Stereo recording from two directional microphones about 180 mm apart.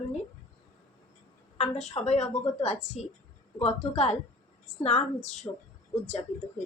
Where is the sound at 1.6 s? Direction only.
35° left (ahead or behind).